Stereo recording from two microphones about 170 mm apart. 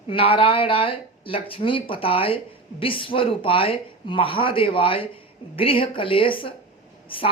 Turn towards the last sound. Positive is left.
turn(degrees=30)  # may be behind; listen again after turning